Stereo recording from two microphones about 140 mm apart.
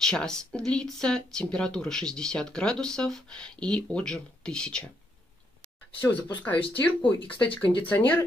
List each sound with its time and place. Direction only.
0.0 s speech: 5° left (ahead or behind)
5.9 s speech: 15° left (ahead or behind)
7.4 s speech: 40° left (ahead or behind)
7.8 s speech: 10° left (ahead or behind)